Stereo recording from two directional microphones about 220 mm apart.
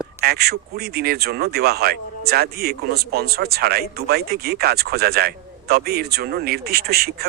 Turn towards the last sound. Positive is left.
turn(degrees=-45)  # may be behind; listen again after turning